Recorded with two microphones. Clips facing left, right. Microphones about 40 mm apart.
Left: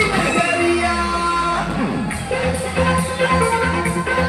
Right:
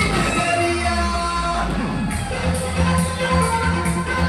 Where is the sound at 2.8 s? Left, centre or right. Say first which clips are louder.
Left 5 dB; centre.